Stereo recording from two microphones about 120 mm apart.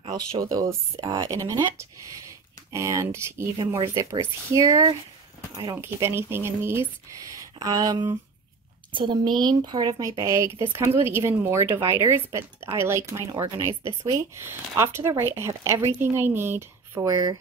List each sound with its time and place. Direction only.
0.4 s speech: 30° right (ahead or behind)